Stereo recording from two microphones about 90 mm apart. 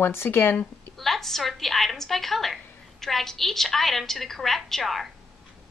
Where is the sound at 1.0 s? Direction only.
5° left (ahead or behind).